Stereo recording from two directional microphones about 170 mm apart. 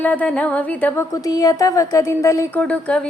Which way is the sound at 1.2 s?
20° left (ahead or behind).